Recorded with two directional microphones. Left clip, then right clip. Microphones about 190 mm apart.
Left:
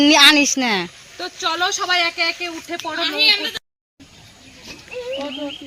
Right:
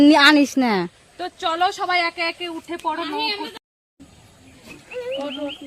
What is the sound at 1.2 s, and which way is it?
Speech, 20° right (ahead or behind).